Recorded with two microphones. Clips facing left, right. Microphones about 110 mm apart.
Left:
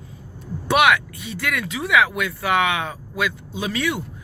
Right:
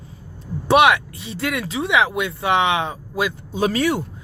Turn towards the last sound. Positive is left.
turn(degrees=-40)  # may be behind; listen again after turning